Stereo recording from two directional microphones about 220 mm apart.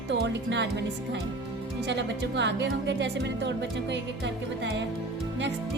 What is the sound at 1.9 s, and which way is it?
Music, 50° right (ahead or behind).